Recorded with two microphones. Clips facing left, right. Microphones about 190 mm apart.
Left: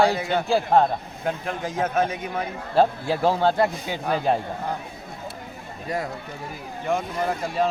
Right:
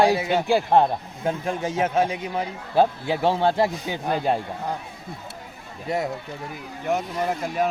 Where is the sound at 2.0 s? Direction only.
15° right (ahead or behind).